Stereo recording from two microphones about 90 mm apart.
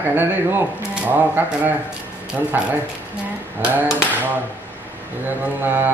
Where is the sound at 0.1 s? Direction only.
25° right (ahead or behind).